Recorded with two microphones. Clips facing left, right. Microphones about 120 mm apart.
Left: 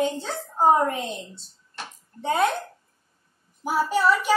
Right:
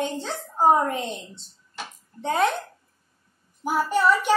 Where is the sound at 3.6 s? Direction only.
5° left (ahead or behind).